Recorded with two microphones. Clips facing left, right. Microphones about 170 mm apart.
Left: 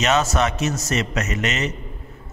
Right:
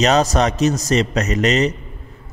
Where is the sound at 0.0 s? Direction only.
35° right (ahead or behind).